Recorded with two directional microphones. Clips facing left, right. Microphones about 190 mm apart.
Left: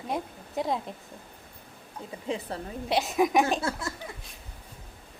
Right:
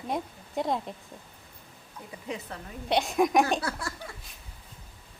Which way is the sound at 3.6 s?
25° left (ahead or behind).